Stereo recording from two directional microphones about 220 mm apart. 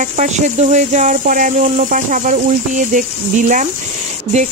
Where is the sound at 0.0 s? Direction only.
35° right (ahead or behind).